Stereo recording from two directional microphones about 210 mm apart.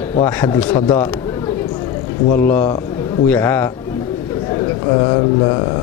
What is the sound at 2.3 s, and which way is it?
Speech, 10° left (ahead or behind).